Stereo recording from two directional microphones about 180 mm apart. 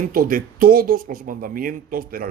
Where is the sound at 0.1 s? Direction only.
50° right (ahead or behind).